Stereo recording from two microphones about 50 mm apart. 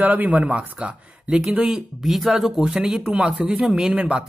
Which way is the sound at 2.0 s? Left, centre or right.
Centre.